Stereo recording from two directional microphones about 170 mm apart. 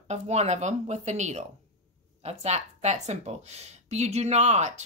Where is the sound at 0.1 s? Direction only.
40° right (ahead or behind).